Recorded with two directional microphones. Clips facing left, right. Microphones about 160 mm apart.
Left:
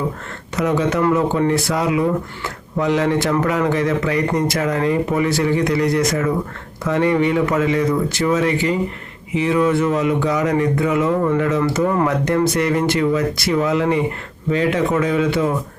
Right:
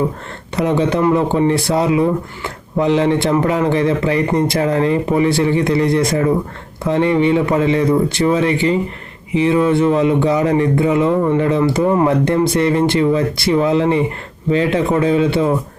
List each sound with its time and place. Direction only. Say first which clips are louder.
0.5 s speech: right 2 dB; 25° right (ahead or behind)